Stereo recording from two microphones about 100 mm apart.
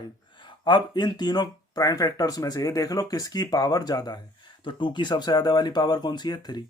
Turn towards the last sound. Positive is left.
turn(degrees=45)  # may be behind; listen again after turning